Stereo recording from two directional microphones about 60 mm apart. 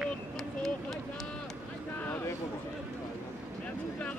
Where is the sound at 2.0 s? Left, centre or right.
Left.